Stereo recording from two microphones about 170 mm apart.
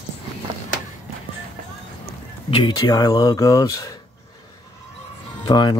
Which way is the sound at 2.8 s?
20° left (ahead or behind).